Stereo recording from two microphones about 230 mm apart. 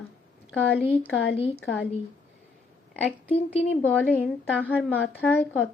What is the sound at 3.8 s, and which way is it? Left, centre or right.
Speech, centre.